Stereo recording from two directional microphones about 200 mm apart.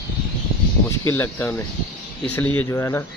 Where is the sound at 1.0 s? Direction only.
10° left (ahead or behind).